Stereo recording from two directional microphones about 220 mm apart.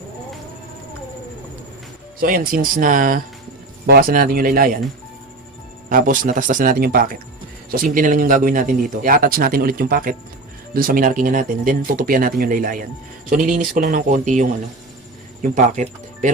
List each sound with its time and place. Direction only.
2.2 s speech: 40° right (ahead or behind)
5.9 s speech: 40° right (ahead or behind)